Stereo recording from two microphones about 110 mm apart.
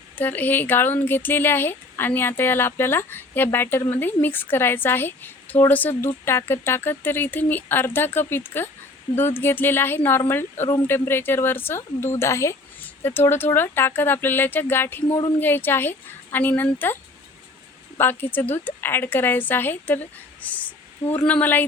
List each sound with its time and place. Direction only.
0.2 s speech: 15° left (ahead or behind)
20.4 s a sound: 15° left (ahead or behind)
21.2 s speech: 15° left (ahead or behind)